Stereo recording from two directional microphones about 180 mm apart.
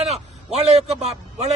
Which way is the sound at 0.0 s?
35° right (ahead or behind).